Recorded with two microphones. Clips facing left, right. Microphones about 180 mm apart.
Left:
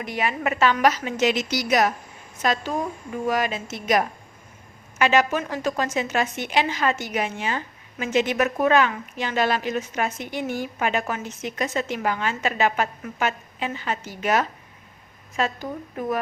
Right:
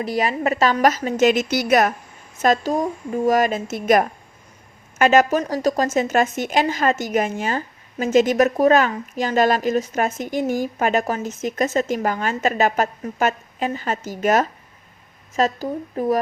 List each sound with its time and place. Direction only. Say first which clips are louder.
0.0 s speech: right 5 dB; 35° right (ahead or behind); by 1.9 s 55° right (ahead or behind)
2.4 s speech: right 6 dB; 45° right (ahead or behind)